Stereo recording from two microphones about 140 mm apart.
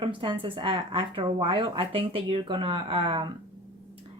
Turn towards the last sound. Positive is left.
turn(degrees=-35)  # may be behind; listen again after turning